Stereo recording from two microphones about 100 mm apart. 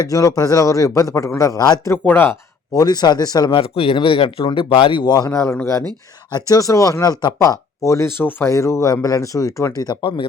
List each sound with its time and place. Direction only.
0.0 s speech: 35° left (ahead or behind)
1.9 s speech: 20° left (ahead or behind)
2.7 s speech: 40° left (ahead or behind)
3.5 s speech: 65° left (ahead or behind); by 9.9 s 35° left (ahead or behind)
10.0 s speech: 55° left (ahead or behind)